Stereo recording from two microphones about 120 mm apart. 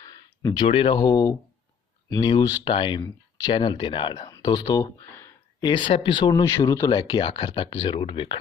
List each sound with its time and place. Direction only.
0.6 s speech: 45° left (ahead or behind)
4.3 s speech: 30° left (ahead or behind)
4.8 s speech: 20° left (ahead or behind)
5.5 s speech: 40° left (ahead or behind)
6.4 s speech: 25° left (ahead or behind); by 8.4 s 45° left (ahead or behind)